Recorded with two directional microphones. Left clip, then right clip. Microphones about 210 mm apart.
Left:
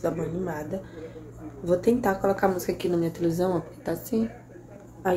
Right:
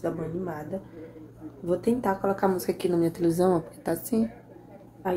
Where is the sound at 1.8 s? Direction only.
Centre (ahead or behind).